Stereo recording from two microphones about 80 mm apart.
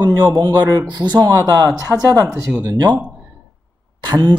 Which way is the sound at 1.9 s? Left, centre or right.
Centre.